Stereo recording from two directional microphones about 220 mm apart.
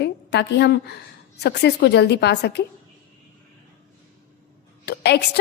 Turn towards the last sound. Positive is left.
turn(degrees=50)  # may be behind; listen again after turning